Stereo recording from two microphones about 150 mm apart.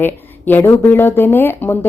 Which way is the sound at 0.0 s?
15° left (ahead or behind).